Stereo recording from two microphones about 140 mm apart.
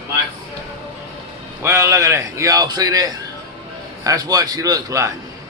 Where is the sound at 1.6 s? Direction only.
20° right (ahead or behind).